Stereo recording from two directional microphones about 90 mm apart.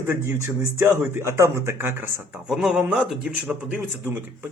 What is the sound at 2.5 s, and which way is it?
A man's voice, 5° right (ahead or behind).